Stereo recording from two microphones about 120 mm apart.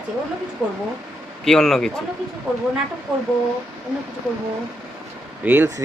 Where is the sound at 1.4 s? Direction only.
5° left (ahead or behind).